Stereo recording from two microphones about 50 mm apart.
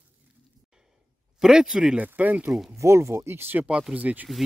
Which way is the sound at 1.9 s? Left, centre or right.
Right.